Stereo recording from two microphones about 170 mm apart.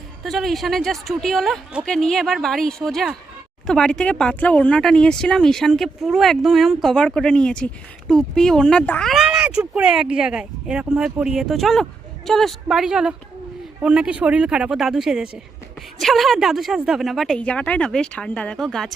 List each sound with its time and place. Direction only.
0.3 s speech: centre (ahead or behind)